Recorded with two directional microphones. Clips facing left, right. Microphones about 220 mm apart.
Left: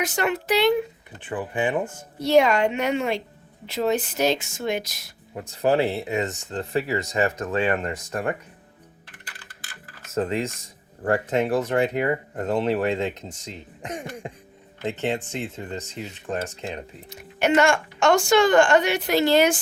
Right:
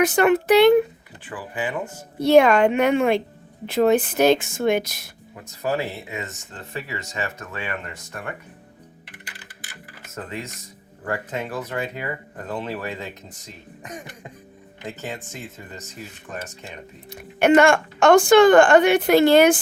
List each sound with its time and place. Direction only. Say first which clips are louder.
0.0 s speech: right 8 dB; 55° right (ahead or behind)
1.2 s speech: left 4 dB; 20° left (ahead or behind)
2.1 s speech: right 4 dB; 55° right (ahead or behind)
5.6 s speech: left 5 dB; 30° left (ahead or behind)
9.0 s music: right 3 dB; 15° right (ahead or behind)
10.2 s speech: left 9 dB; 30° left (ahead or behind)
17.1 s speech: right 5 dB; 55° right (ahead or behind)